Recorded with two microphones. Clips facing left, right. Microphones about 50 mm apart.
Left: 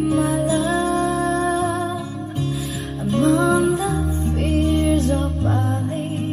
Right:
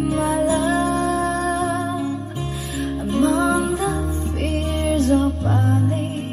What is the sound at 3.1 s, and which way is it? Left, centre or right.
Music, centre.